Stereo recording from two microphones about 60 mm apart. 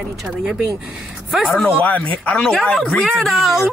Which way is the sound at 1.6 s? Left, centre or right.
Left.